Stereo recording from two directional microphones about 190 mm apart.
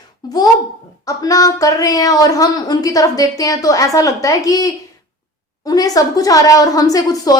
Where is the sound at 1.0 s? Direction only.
20° left (ahead or behind).